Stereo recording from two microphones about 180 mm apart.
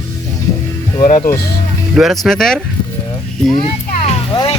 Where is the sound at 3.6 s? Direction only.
30° left (ahead or behind).